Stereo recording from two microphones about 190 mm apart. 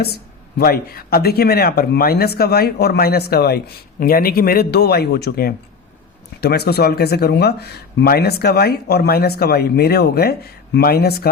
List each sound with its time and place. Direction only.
0.0 s speech: 55° left (ahead or behind)